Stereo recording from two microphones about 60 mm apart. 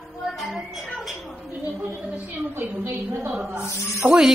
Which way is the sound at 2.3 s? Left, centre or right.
Right.